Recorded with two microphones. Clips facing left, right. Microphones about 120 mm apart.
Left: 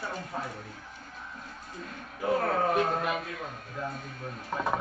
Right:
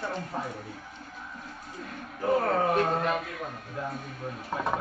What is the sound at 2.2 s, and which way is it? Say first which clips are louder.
Speech: right 2 dB; 5° right (ahead or behind).